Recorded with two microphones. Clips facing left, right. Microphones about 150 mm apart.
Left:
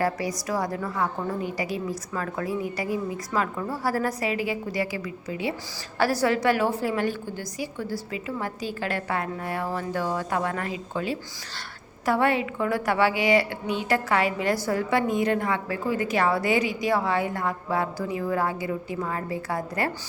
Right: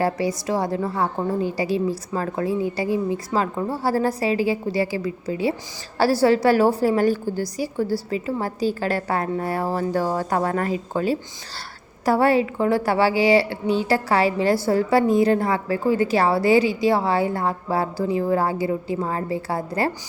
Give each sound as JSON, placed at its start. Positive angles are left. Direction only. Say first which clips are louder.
{"t": 0.0, "sound": "a woman's voice", "louder": "right 4 dB", "side_deg": -25}